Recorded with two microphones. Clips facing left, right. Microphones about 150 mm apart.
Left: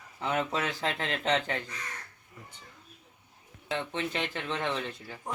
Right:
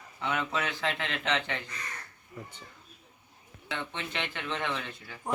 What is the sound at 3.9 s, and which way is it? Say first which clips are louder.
Speech: left 4 dB; 35° left (ahead or behind).